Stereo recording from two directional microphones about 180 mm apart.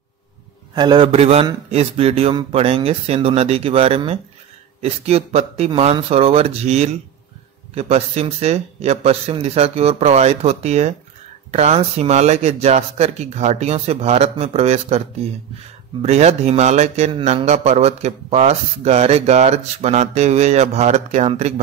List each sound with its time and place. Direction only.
0.7 s a man's voice: 25° right (ahead or behind)